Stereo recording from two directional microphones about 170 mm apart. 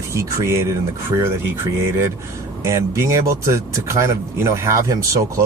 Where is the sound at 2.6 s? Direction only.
15° right (ahead or behind).